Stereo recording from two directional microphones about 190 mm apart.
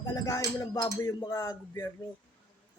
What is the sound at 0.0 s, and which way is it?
A man's voice, 15° left (ahead or behind).